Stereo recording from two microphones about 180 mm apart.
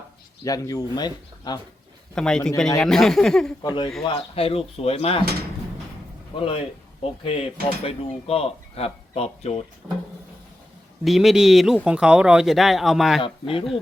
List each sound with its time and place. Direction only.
0.4 s speech: 20° left (ahead or behind)
2.1 s speech: 5° left (ahead or behind)
3.6 s speech: 20° left (ahead or behind)
6.4 s speech: 30° left (ahead or behind)
9.8 s speech: 5° right (ahead or behind)
11.0 s speech: centre (ahead or behind)